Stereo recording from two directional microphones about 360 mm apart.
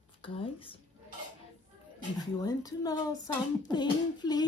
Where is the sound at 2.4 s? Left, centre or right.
Centre.